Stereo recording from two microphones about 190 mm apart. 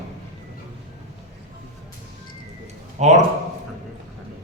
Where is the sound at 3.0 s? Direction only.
35° right (ahead or behind).